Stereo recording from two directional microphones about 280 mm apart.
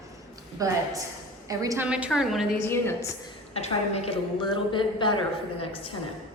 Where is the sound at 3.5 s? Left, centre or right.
Left.